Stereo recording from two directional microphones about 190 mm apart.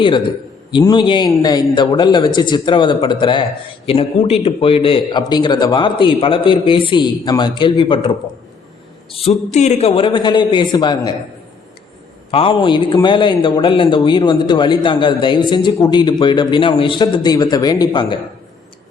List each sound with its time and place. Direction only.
0.7 s a man's voice: 25° left (ahead or behind)
9.1 s a man's voice: 30° left (ahead or behind)
12.3 s a man's voice: 30° left (ahead or behind)